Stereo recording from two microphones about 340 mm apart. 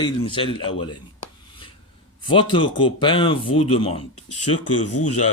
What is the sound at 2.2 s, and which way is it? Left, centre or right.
Speech, centre.